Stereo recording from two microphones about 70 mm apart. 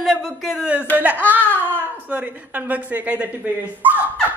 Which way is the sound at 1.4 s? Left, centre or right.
Left.